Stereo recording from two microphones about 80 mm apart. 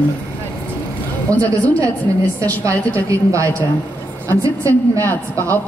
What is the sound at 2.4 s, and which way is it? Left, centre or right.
A woman's voice, right.